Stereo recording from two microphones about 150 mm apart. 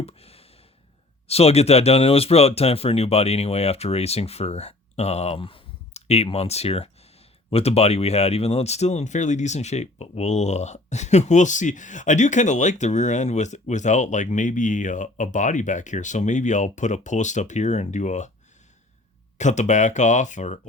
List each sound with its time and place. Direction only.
0.0 s a sound: 40° left (ahead or behind)
1.3 s speech: 45° left (ahead or behind)
19.4 s speech: 50° left (ahead or behind)